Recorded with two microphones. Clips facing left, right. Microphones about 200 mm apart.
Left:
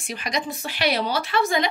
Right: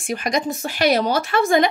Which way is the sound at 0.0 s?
50° right (ahead or behind).